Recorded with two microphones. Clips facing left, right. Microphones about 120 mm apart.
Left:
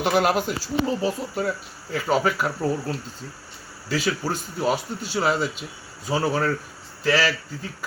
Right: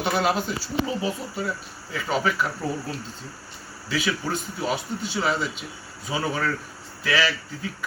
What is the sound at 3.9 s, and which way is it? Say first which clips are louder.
A man's voice: left 1 dB; 40° left (ahead or behind).